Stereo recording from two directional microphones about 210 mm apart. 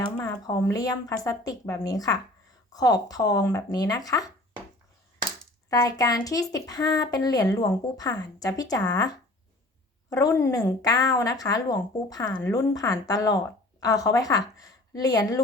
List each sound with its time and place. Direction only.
0.2 s a woman's voice: 10° left (ahead or behind)
5.7 s a woman's voice: 15° left (ahead or behind)